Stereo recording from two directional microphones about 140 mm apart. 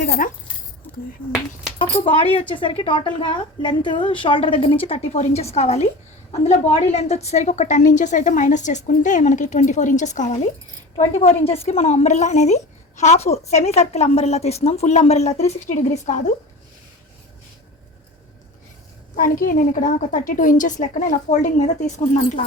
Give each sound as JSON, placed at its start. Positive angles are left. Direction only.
{"t": 0.0, "sound": "a woman's voice", "side_deg": 65}
{"t": 1.8, "sound": "a woman's voice", "side_deg": 40}
{"t": 11.0, "sound": "a woman's voice", "side_deg": 50}
{"t": 19.1, "sound": "a woman's voice", "side_deg": 80}